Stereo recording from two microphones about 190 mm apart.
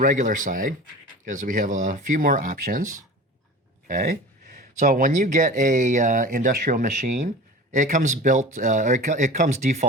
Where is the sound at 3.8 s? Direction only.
40° right (ahead or behind).